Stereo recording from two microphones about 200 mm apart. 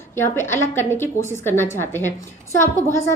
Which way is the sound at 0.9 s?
10° left (ahead or behind).